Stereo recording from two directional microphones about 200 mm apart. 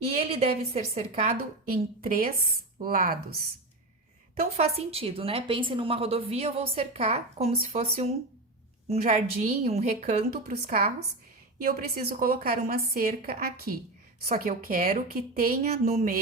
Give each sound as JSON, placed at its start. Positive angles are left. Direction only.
{"t": 0.3, "sound": "a woman's voice", "side_deg": -30}
{"t": 1.7, "sound": "a woman's voice", "side_deg": -45}
{"t": 4.4, "sound": "a woman's voice", "side_deg": -30}